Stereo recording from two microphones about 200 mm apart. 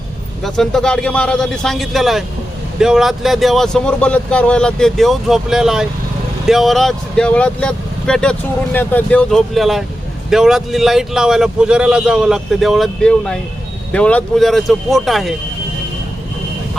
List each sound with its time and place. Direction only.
0.4 s speech: centre (ahead or behind)